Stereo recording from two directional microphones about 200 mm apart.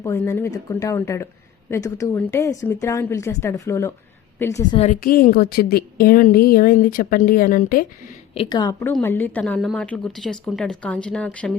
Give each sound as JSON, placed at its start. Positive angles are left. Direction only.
{"t": 0.0, "sound": "speech", "side_deg": 15}
{"t": 4.8, "sound": "a woman's voice", "side_deg": 40}
{"t": 8.4, "sound": "a woman's voice", "side_deg": 20}